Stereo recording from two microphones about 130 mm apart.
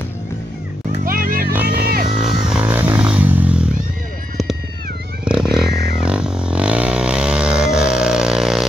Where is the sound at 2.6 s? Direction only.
15° right (ahead or behind).